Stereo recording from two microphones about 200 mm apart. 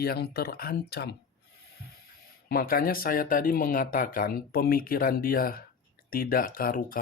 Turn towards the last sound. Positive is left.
turn(degrees=45)  # may be behind; listen again after turning